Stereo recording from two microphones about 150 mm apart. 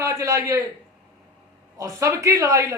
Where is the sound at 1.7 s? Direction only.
20° right (ahead or behind).